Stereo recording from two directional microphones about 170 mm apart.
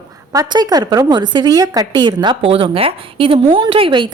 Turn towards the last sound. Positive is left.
turn(degrees=-30)  # may be behind; listen again after turning